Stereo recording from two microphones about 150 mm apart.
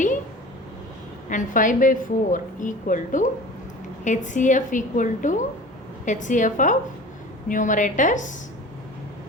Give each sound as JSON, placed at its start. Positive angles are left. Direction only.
{"t": 1.3, "sound": "a woman's voice", "side_deg": 60}